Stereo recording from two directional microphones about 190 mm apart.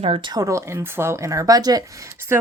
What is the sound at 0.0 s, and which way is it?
Speech, 25° right (ahead or behind).